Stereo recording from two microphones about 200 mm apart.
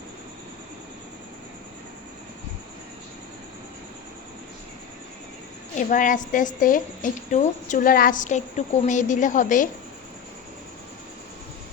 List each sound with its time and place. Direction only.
5.9 s a woman's voice: 40° left (ahead or behind)